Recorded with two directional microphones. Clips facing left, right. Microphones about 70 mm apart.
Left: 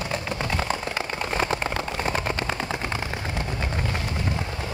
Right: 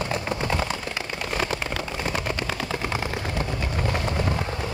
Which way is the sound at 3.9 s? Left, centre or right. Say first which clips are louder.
Right 3 dB; right.